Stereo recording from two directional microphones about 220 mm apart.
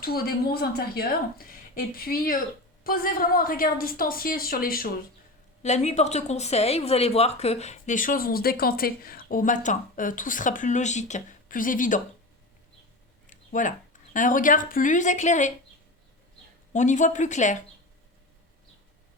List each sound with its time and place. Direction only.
0.0 s a woman's voice: 45° left (ahead or behind)
5.6 s speech: 30° left (ahead or behind)
13.2 s speech: 35° left (ahead or behind)
16.7 s speech: 35° left (ahead or behind)